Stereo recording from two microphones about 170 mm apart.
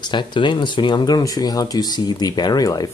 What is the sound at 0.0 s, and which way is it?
Speech, 25° left (ahead or behind).